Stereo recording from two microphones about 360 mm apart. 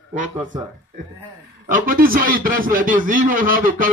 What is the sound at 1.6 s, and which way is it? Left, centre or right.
A man's voice, right.